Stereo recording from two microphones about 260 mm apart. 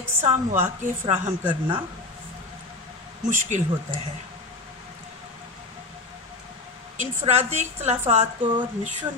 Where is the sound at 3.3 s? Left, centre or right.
Right.